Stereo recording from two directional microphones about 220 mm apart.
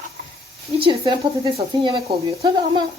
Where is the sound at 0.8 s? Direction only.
20° right (ahead or behind).